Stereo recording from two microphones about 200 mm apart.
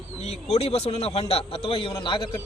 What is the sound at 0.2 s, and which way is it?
Speech, 30° left (ahead or behind).